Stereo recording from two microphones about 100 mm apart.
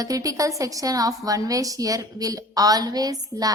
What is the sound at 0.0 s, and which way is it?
A woman's voice, 35° right (ahead or behind).